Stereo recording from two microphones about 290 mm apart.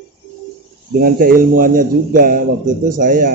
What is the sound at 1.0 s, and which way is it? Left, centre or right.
A man's voice, right.